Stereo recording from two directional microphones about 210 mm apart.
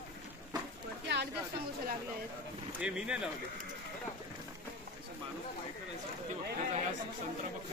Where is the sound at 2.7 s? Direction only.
5° right (ahead or behind).